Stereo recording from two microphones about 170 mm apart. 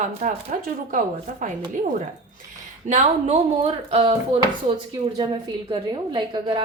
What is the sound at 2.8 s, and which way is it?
A woman's voice, 40° right (ahead or behind).